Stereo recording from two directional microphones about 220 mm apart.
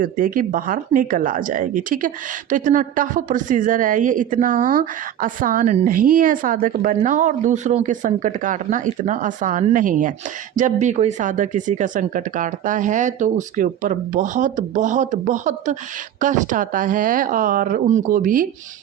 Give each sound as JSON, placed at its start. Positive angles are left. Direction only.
{"t": 0.0, "sound": "speech", "side_deg": -40}